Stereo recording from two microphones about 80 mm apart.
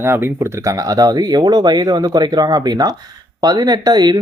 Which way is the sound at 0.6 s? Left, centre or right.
Right.